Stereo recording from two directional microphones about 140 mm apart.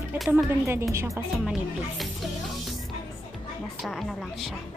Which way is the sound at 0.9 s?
20° right (ahead or behind).